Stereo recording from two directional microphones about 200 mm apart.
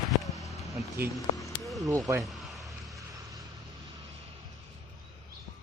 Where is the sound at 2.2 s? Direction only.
Centre (ahead or behind).